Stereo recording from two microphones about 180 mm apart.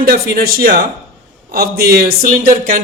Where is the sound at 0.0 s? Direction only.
55° right (ahead or behind).